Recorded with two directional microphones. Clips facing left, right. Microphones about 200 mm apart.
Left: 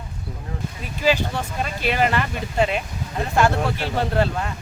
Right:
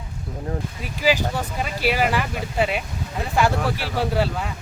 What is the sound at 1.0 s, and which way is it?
Speech, 10° right (ahead or behind).